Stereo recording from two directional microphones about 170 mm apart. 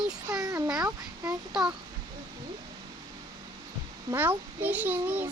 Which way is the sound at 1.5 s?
5° right (ahead or behind).